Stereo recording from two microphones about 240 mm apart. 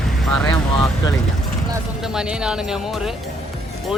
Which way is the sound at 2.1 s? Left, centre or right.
Centre.